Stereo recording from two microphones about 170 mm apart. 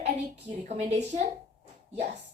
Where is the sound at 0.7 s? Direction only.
40° right (ahead or behind).